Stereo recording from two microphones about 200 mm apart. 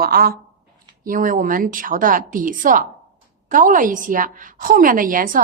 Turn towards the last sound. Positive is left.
turn(degrees=-45)  # may be behind; listen again after turning